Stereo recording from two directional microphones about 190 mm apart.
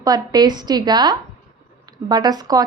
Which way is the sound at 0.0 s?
20° right (ahead or behind).